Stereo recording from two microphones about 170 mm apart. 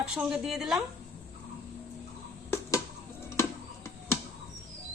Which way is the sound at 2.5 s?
20° left (ahead or behind).